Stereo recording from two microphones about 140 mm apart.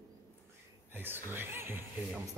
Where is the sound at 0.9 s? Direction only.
15° right (ahead or behind).